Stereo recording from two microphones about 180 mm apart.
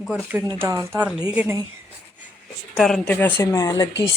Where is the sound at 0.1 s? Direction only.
10° right (ahead or behind).